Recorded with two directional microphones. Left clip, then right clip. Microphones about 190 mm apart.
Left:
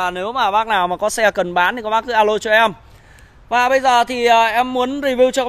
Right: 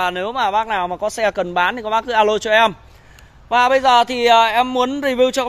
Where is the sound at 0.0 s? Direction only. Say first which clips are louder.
Left 1 dB; centre (ahead or behind).